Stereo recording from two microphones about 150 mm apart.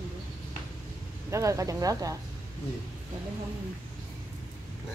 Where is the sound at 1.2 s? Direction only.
20° right (ahead or behind).